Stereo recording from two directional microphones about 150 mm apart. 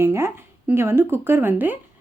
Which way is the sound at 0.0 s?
15° right (ahead or behind).